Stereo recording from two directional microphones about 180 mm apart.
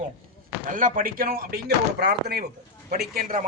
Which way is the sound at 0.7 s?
50° right (ahead or behind).